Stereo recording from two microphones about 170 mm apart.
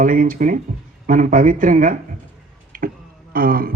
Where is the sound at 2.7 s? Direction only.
55° right (ahead or behind).